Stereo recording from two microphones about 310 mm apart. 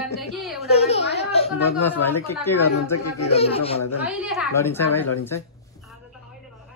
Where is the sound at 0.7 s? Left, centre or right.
Centre.